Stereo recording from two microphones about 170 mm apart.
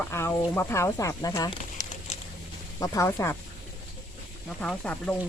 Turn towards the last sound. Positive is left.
turn(degrees=10)  # may be behind; listen again after turning